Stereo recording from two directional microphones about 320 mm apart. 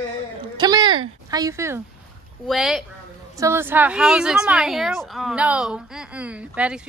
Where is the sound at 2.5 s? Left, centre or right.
Centre.